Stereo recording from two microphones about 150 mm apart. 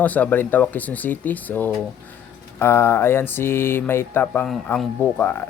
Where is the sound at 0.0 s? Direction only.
10° left (ahead or behind).